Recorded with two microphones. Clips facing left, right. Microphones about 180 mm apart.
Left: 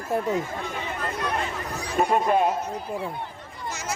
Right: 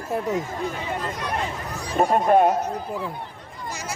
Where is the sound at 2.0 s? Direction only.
50° right (ahead or behind).